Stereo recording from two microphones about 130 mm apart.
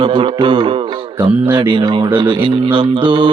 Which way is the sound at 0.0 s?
40° right (ahead or behind).